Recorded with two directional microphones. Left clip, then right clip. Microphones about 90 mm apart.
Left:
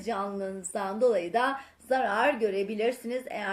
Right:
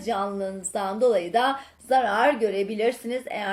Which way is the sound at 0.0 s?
25° left (ahead or behind).